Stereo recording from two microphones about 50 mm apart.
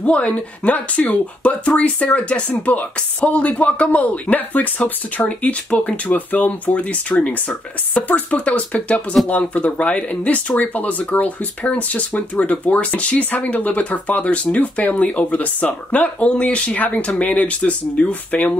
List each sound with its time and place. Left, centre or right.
0.0 s speech: left